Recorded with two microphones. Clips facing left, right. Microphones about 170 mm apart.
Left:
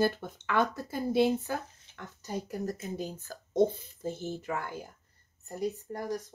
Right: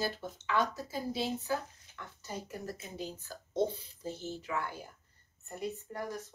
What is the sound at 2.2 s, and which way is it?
Speech, 45° left (ahead or behind).